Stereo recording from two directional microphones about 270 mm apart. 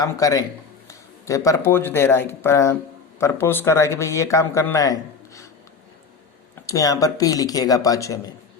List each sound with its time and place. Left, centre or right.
0.0 s speech: centre
6.7 s speech: centre